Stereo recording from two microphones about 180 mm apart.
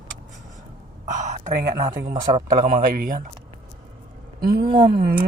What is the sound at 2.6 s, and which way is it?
Speech, 50° right (ahead or behind).